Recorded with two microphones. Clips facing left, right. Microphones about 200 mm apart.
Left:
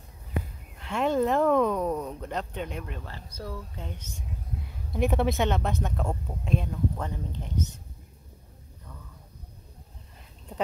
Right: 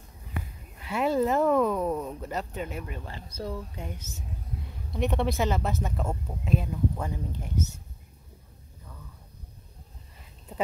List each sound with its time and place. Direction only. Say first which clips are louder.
0.7 s speech: even; 5° right (ahead or behind)
3.1 s speech: right 3 dB; 20° right (ahead or behind)
4.1 s speech: left 1 dB; 5° right (ahead or behind)